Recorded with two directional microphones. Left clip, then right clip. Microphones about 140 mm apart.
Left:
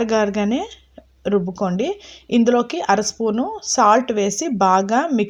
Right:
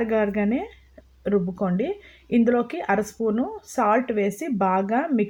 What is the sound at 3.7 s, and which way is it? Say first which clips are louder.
A woman's voice: left 7 dB; 25° left (ahead or behind).